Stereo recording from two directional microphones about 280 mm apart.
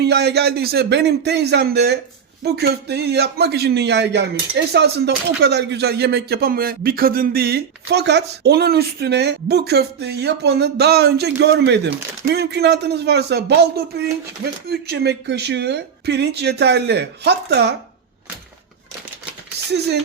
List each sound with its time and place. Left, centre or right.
0.0 s a man's voice: right